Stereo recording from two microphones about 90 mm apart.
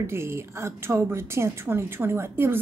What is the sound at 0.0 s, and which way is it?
A woman's voice, 30° right (ahead or behind).